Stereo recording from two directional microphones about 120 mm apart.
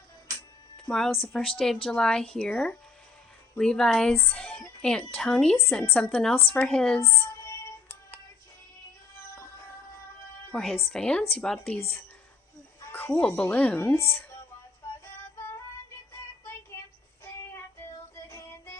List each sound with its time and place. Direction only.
0.9 s a woman's voice: 5° left (ahead or behind)
7.0 s music: 20° left (ahead or behind)
9.3 s music: 25° left (ahead or behind)
10.5 s a woman's voice: centre (ahead or behind)
12.8 s a woman's voice: 15° left (ahead or behind)
18.3 s music: 25° left (ahead or behind)